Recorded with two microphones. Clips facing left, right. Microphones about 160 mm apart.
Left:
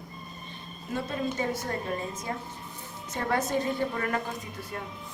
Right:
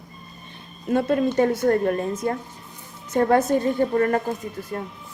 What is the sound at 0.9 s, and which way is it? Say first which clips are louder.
A woman's voice: right 11 dB; 60° right (ahead or behind).